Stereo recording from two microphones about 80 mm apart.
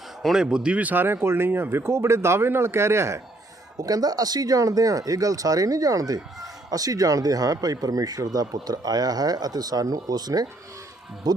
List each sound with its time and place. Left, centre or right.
0.2 s speech: centre; by 3.2 s right
3.8 s speech: right